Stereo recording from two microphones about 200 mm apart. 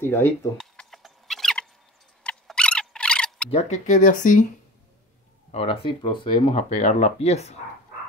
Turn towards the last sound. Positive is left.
turn(degrees=30)  # may be behind; listen again after turning